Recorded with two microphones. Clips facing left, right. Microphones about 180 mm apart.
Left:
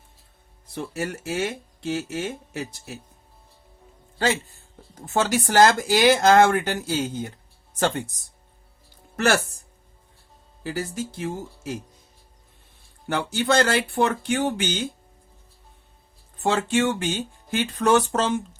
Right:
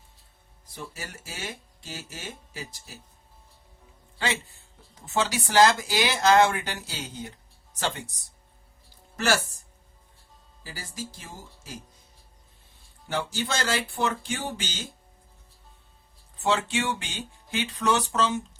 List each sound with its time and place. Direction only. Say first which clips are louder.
0.7 s speech: left 10 dB; 60° left (ahead or behind)
4.9 s speech: left 5 dB; 50° left (ahead or behind)
9.1 s speech: left 4 dB; 60° left (ahead or behind)
10.6 s speech: left 10 dB; 65° left (ahead or behind)
13.1 s speech: left 7 dB; 60° left (ahead or behind)
16.4 s speech: left 5 dB; 50° left (ahead or behind)